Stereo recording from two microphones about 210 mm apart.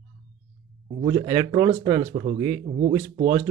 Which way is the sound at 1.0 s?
25° right (ahead or behind).